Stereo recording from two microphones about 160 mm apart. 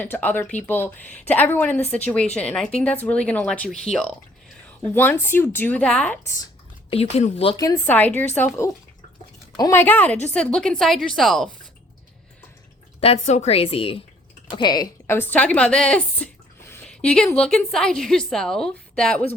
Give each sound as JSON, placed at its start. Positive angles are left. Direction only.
{"t": 0.0, "sound": "a woman's voice", "side_deg": 10}
{"t": 6.9, "sound": "a woman's voice", "side_deg": 40}
{"t": 7.5, "sound": "a woman's voice", "side_deg": 20}
{"t": 9.6, "sound": "a woman's voice", "side_deg": 20}
{"t": 13.0, "sound": "a woman's voice", "side_deg": 40}
{"t": 15.0, "sound": "speech", "side_deg": 15}